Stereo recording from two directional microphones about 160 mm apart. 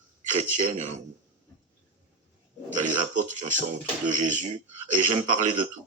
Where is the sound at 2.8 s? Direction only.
50° right (ahead or behind).